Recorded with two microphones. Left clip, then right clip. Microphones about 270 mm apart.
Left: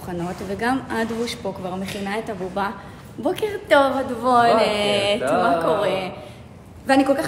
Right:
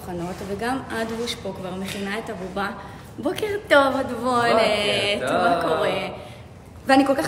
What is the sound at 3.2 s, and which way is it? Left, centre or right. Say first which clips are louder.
A woman's voice: left 2 dB; centre.